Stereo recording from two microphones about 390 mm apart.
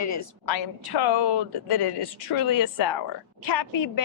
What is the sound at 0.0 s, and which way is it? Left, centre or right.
Speech, left.